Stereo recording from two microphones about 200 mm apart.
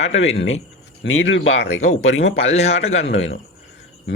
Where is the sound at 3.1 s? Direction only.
70° left (ahead or behind).